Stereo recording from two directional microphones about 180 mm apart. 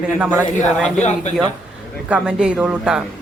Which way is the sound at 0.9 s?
40° left (ahead or behind).